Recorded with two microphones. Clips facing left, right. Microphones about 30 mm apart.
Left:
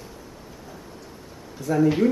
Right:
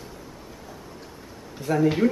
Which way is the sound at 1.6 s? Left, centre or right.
Right.